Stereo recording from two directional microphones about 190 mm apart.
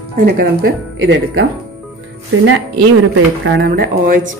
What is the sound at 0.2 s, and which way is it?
Speech, 55° right (ahead or behind).